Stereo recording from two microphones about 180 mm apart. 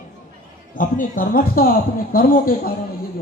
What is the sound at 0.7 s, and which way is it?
A man's voice, 50° left (ahead or behind).